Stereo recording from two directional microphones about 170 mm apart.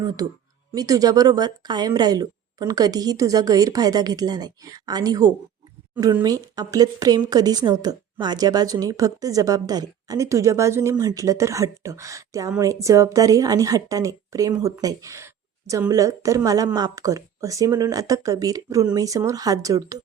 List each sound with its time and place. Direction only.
0.7 s a woman's voice: 20° right (ahead or behind)